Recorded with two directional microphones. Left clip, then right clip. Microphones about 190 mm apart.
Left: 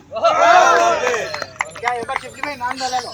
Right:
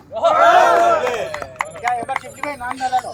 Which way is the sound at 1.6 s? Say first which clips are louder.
Even; 20° left (ahead or behind).